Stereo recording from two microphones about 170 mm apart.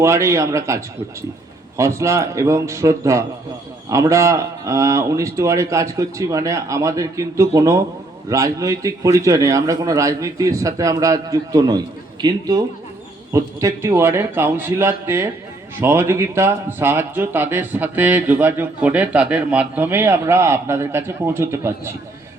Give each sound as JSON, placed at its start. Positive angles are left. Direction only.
{"t": 0.0, "sound": "a man's voice", "side_deg": -15}